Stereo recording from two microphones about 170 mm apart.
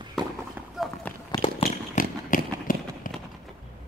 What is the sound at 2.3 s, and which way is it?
Run, 55° left (ahead or behind).